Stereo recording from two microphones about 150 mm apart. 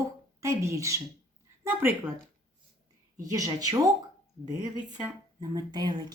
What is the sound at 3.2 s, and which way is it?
Speech, 25° right (ahead or behind).